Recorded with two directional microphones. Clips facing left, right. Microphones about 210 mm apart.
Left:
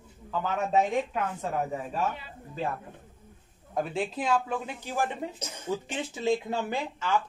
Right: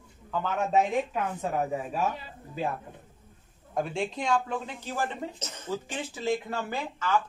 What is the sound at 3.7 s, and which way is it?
Speech, centre (ahead or behind).